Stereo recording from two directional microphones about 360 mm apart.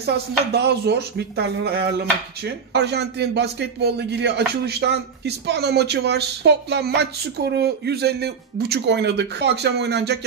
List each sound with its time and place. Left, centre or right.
0.5 s speech: right